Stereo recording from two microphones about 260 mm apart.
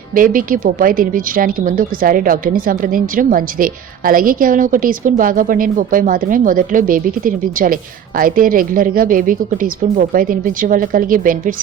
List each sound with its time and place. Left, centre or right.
0.1 s a woman's voice: right